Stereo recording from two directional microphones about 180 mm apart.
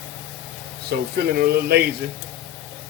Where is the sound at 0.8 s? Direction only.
60° right (ahead or behind).